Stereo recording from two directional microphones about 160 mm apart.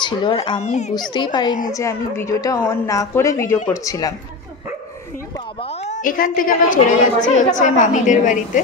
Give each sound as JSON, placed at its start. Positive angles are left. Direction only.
{"t": 0.0, "sound": "a woman's voice", "side_deg": 30}
{"t": 0.6, "sound": "a woman's voice", "side_deg": 45}
{"t": 1.1, "sound": "a woman's voice", "side_deg": 30}
{"t": 5.6, "sound": "a woman's voice", "side_deg": 40}